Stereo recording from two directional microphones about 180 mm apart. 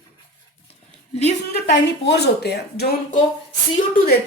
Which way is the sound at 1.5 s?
70° left (ahead or behind).